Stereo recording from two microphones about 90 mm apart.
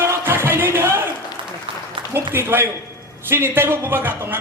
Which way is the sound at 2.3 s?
25° right (ahead or behind).